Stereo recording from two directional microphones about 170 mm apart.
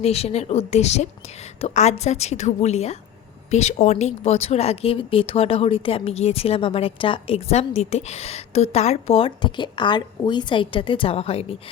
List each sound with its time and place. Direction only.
0.0 s speech: 35° left (ahead or behind)